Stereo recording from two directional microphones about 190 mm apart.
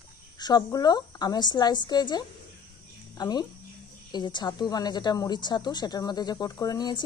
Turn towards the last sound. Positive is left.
turn(degrees=20)  # may be behind; listen again after turning